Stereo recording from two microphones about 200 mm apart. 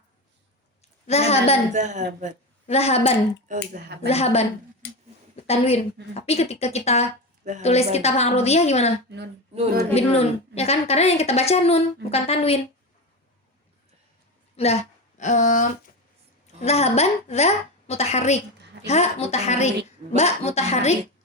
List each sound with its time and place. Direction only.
1.0 s a woman's voice: 30° left (ahead or behind)
1.7 s speech: 35° right (ahead or behind)
2.6 s a woman's voice: 30° left (ahead or behind)
4.8 s a sound: 65° left (ahead or behind)
5.5 s a woman's voice: 30° left (ahead or behind)
9.9 s a woman's voice: 30° left (ahead or behind)
14.5 s a woman's voice: 30° left (ahead or behind)